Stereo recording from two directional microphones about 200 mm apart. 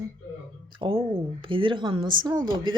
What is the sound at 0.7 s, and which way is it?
A woman's voice, 25° right (ahead or behind).